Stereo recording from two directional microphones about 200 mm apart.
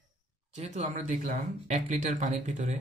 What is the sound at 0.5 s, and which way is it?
Speech, 35° right (ahead or behind).